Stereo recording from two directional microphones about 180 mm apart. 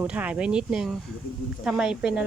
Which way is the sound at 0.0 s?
10° right (ahead or behind).